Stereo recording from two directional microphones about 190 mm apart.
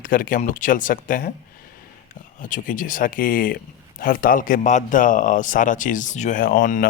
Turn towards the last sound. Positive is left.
turn(degrees=45)  # may be behind; listen again after turning